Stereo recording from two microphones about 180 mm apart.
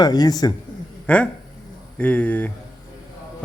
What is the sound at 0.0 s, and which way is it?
Speech, 20° left (ahead or behind).